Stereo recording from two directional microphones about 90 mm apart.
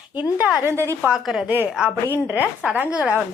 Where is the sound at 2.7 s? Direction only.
20° right (ahead or behind).